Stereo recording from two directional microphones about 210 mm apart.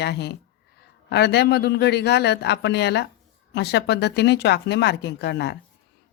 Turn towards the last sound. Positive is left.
turn(degrees=55)  # may be behind; listen again after turning